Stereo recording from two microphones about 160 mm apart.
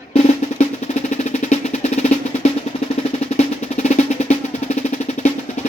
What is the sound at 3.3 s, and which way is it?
Drum roll, 45° left (ahead or behind).